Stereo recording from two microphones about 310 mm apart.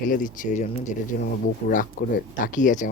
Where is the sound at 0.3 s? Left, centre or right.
Left.